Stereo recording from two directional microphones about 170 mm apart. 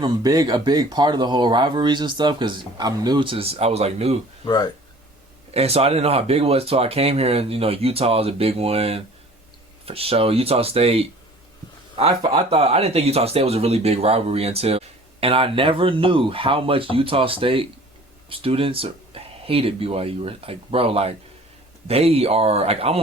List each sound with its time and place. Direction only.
0.0 s speech: 20° right (ahead or behind); by 4.2 s 40° right (ahead or behind)
4.4 s speech: 25° left (ahead or behind)
5.5 s speech: 35° right (ahead or behind)